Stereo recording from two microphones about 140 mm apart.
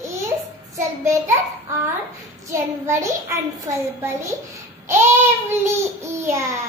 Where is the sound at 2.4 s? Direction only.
20° right (ahead or behind).